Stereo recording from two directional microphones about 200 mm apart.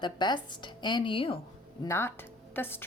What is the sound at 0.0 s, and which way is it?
A woman's voice, 20° left (ahead or behind).